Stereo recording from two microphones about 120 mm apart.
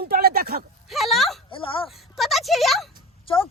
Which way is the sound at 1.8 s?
Centre (ahead or behind).